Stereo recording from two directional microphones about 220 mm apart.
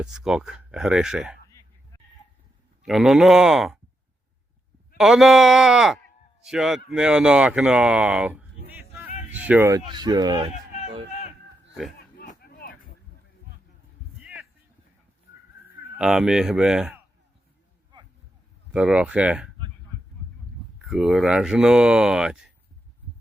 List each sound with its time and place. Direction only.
0.0 s speech: 5° right (ahead or behind)
2.8 s speech: centre (ahead or behind)
4.9 s speech: centre (ahead or behind); by 10.5 s 20° right (ahead or behind)
11.1 s a sound: 30° left (ahead or behind)
12.1 s vehicle: 45° left (ahead or behind)
16.0 s speech: centre (ahead or behind)
18.7 s speech: 5° right (ahead or behind)
20.8 s speech: centre (ahead or behind)